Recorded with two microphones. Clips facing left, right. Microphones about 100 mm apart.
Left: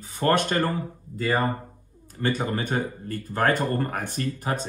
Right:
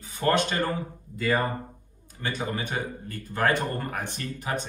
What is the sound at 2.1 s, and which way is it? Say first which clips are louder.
Speech: left 5 dB; 50° left (ahead or behind).